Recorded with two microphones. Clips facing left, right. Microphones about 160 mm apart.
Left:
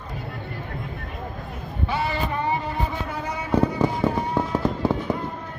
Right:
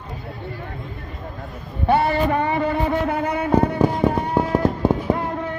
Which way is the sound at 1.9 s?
55° right (ahead or behind).